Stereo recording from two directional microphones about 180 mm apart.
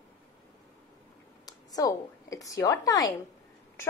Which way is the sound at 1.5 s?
20° left (ahead or behind).